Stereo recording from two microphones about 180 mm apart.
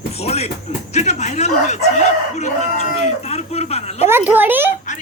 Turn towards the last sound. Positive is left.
turn(degrees=-10)  # may be behind; listen again after turning